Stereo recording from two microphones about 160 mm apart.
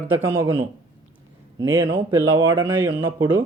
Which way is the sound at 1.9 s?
15° right (ahead or behind).